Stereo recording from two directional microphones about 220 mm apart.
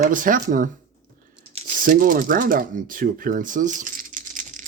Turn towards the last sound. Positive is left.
turn(degrees=-35)  # may be behind; listen again after turning